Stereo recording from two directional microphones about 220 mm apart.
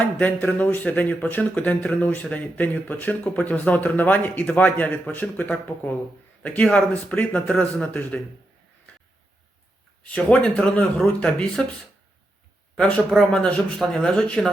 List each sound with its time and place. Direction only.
0.0 s a man's voice: 5° left (ahead or behind)
10.0 s a man's voice: 5° left (ahead or behind)
12.7 s a man's voice: 5° left (ahead or behind)